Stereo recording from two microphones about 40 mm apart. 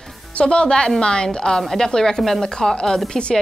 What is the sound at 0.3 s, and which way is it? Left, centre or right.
A woman's voice, left.